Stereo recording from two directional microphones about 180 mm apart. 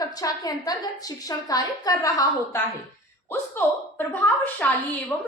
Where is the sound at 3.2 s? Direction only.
10° left (ahead or behind).